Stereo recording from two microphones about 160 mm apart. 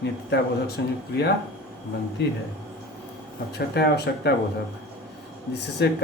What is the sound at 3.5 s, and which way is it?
Speech, 90° left.